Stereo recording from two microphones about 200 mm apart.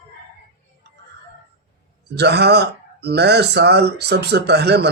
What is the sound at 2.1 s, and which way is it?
Speech, 55° right (ahead or behind).